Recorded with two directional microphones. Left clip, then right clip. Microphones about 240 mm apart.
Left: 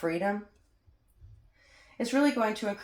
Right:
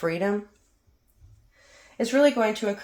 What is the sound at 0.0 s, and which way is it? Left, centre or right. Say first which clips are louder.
Speech: right 4 dB; right.